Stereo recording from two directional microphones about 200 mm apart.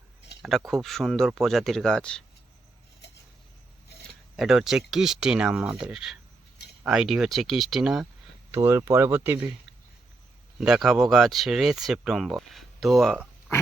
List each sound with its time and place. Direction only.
0.3 s a sound: 55° left (ahead or behind)
0.7 s speech: centre (ahead or behind)
4.4 s speech: centre (ahead or behind)
8.5 s speech: 15° right (ahead or behind)
10.6 s speech: 5° right (ahead or behind)